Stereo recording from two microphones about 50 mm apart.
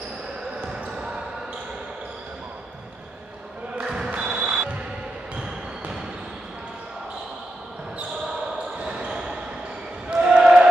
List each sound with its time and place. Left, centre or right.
0.7 s basketball bounce: centre
3.8 s basketball bounce: centre
4.1 s music: centre
8.7 s basketball bounce: right